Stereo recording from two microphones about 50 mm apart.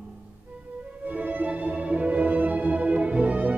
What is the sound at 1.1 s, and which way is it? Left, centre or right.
Music, right.